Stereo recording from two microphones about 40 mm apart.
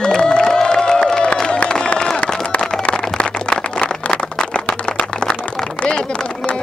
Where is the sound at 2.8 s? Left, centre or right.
Left.